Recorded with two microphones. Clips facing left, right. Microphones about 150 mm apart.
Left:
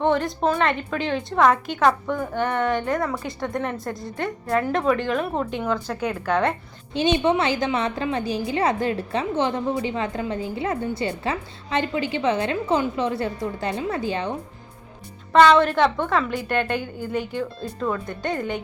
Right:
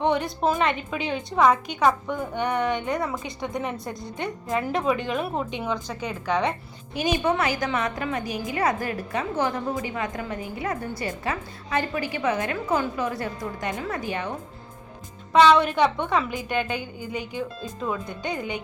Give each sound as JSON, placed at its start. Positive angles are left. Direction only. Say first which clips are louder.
{"t": 0.0, "sound": "speech", "louder": "left 2 dB", "side_deg": 0}
{"t": 6.9, "sound": "a woman's voice", "louder": "left 4 dB", "side_deg": 25}
{"t": 15.3, "sound": "speech", "louder": "left 2 dB", "side_deg": -5}